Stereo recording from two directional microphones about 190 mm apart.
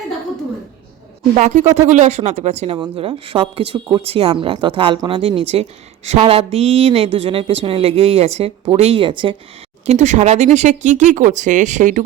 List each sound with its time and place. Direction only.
1.4 s a woman's voice: 40° right (ahead or behind)
2.7 s a woman's voice: 25° right (ahead or behind); by 12.0 s 40° right (ahead or behind)